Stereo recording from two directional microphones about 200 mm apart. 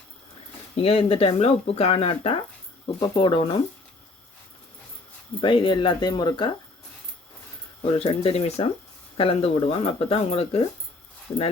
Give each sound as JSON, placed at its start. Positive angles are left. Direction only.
{"t": 0.8, "sound": "speech", "side_deg": 30}
{"t": 5.4, "sound": "speech", "side_deg": 25}
{"t": 7.8, "sound": "speech", "side_deg": 30}